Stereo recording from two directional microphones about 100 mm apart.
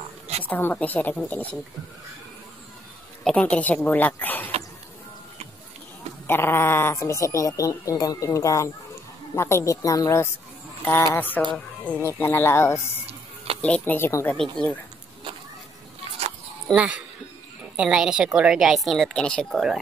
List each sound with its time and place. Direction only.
0.4 s speech: 20° left (ahead or behind)
3.3 s speech: 10° left (ahead or behind)
6.2 s speech: 25° left (ahead or behind)
13.6 s speech: 15° left (ahead or behind)
14.3 s speech: 5° left (ahead or behind)
16.7 s a woman's voice: 10° right (ahead or behind); by 19.6 s 5° left (ahead or behind)